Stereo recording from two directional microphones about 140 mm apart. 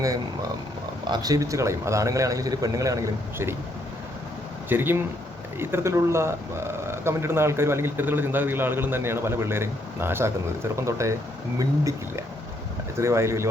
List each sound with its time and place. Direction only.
0.0 s a man's voice: 25° right (ahead or behind)
4.7 s speech: 15° right (ahead or behind)
13.0 s a man's voice: 20° right (ahead or behind)